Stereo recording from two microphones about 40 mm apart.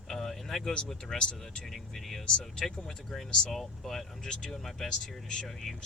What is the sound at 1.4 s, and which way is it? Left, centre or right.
Speech, centre.